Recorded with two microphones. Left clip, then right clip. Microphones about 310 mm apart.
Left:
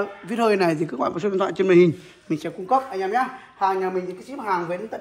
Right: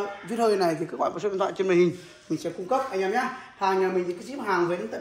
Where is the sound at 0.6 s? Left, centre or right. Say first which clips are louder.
Left 3 dB; left.